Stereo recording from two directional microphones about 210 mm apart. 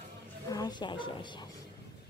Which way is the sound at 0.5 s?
20° left (ahead or behind).